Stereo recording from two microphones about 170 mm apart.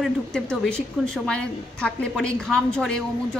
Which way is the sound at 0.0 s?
5° left (ahead or behind).